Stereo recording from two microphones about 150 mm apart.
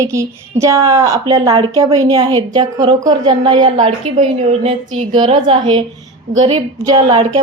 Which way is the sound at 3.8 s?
45° right (ahead or behind).